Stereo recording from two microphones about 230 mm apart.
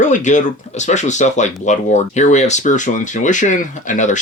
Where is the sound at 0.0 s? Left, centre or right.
Left.